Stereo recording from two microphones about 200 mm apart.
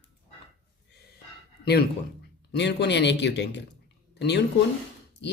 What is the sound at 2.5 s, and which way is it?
Speech, 60° left (ahead or behind).